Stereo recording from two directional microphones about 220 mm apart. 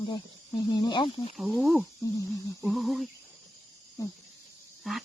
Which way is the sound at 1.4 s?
Centre (ahead or behind).